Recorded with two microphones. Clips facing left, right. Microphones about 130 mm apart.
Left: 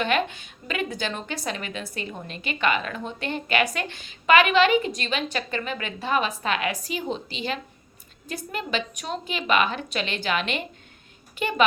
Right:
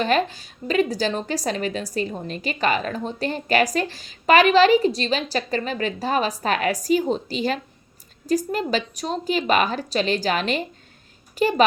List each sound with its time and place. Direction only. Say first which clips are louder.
0.0 s a woman's voice: right 3 dB; 35° right (ahead or behind)